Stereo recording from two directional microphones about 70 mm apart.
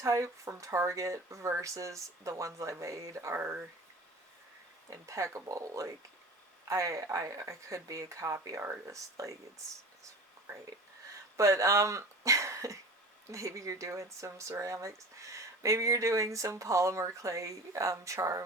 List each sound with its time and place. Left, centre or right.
0.0 s speech: right
3.3 s speech: right
4.9 s speech: right
11.3 s speech: right